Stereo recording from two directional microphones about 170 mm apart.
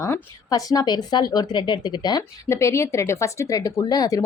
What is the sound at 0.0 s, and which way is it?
A woman's voice, 20° left (ahead or behind).